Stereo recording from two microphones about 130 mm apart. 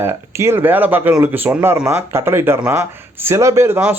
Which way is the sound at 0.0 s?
20° right (ahead or behind).